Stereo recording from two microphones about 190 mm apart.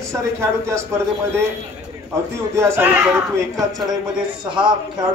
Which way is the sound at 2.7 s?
10° right (ahead or behind).